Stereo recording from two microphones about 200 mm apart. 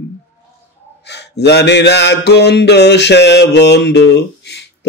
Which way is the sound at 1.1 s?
55° left (ahead or behind).